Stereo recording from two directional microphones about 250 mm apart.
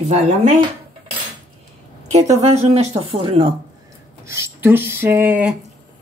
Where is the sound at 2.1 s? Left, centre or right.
Right.